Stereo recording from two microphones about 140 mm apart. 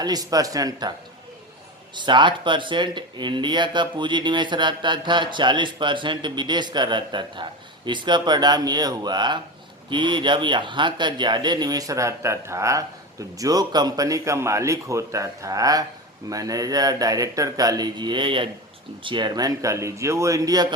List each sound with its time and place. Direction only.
0.0 s speech: 25° right (ahead or behind)
2.0 s speech: 35° right (ahead or behind)